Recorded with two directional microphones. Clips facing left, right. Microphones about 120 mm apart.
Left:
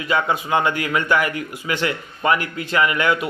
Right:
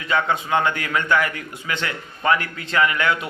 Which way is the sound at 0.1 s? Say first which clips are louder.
Left 1 dB; 10° left (ahead or behind).